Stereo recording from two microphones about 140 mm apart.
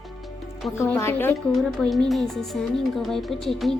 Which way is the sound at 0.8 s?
20° left (ahead or behind).